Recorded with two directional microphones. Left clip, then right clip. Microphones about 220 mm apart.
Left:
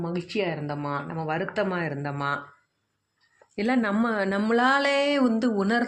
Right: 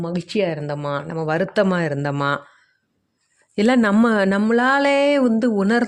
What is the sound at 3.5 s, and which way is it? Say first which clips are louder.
Speech: right 8 dB; 55° right (ahead or behind).